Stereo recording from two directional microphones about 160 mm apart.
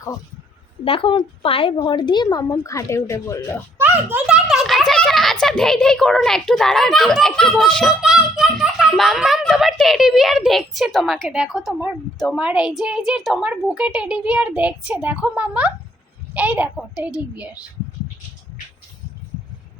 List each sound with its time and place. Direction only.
0.9 s a woman's voice: 35° left (ahead or behind)
3.8 s speech: 10° right (ahead or behind)
4.4 s a child's voice: centre (ahead or behind)